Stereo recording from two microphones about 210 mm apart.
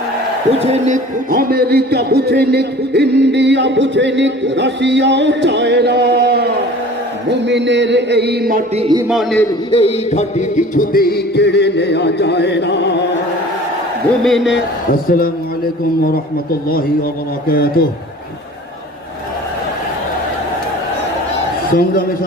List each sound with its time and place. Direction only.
0.6 s a man's voice: 35° right (ahead or behind)
8.7 s a man's voice: 25° right (ahead or behind)
9.0 s a man's voice: centre (ahead or behind)
9.7 s music: 30° left (ahead or behind); by 13.1 s 55° left (ahead or behind)
14.3 s a man's voice: centre (ahead or behind)
15.1 s a man's voice: 45° left (ahead or behind)
16.1 s music: 45° left (ahead or behind)
21.7 s music: 45° left (ahead or behind)